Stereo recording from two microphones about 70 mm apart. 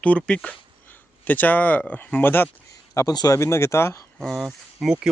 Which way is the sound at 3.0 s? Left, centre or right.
Left.